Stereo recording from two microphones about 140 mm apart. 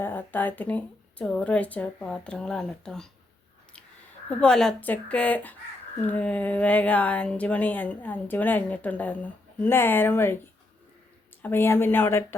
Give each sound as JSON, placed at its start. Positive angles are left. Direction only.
{"t": 0.0, "sound": "speech", "side_deg": 15}
{"t": 4.3, "sound": "speech", "side_deg": 5}
{"t": 11.4, "sound": "speech", "side_deg": 15}